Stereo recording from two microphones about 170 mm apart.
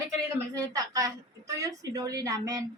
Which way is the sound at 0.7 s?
20° right (ahead or behind).